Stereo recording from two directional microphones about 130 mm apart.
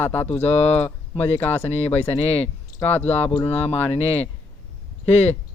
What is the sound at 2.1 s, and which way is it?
Speech, 55° left (ahead or behind).